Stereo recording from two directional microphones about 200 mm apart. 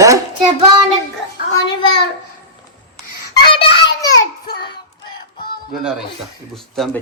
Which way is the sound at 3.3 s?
25° left (ahead or behind).